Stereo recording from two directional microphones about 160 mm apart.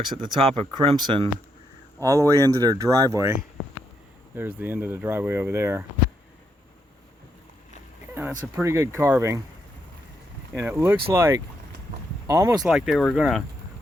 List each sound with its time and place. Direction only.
0.2 s speech: 35° right (ahead or behind)
2.0 s speech: 20° right (ahead or behind)
4.4 s speech: 15° right (ahead or behind)
8.1 s speech: 15° right (ahead or behind)
10.5 s speech: 15° right (ahead or behind)
12.6 s speech: centre (ahead or behind)